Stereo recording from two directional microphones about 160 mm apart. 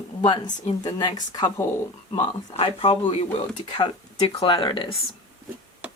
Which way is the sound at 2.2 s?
35° left (ahead or behind).